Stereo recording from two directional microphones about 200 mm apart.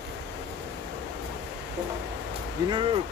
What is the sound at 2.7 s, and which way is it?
Speech, 25° right (ahead or behind).